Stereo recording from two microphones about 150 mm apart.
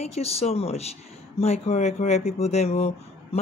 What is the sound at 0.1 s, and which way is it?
Speech, 45° left (ahead or behind).